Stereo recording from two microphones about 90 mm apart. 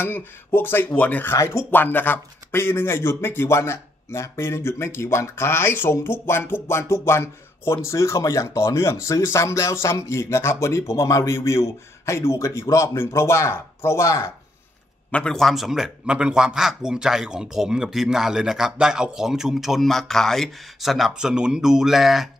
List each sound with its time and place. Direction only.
0.0 s speech: 25° left (ahead or behind)
1.3 s speech: 30° left (ahead or behind)
15.0 s a man's voice: 15° left (ahead or behind)
15.3 s a man's voice: centre (ahead or behind)